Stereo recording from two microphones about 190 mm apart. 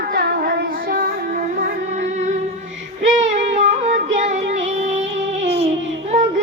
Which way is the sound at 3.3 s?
35° right (ahead or behind).